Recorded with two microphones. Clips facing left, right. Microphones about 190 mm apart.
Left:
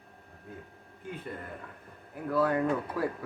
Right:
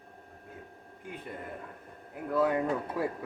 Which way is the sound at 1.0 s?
15° right (ahead or behind).